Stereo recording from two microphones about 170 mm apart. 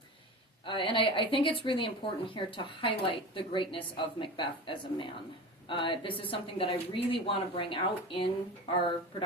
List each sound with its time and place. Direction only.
0.6 s a woman's voice: 30° left (ahead or behind)